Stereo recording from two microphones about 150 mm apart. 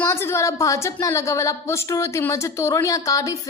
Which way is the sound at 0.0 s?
15° left (ahead or behind).